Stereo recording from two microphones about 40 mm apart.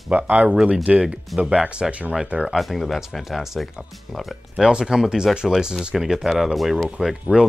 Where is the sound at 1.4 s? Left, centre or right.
Right.